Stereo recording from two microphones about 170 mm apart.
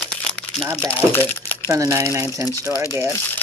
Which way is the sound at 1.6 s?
20° right (ahead or behind).